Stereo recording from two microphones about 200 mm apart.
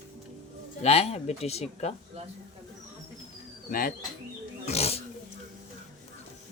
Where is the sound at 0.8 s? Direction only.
30° left (ahead or behind).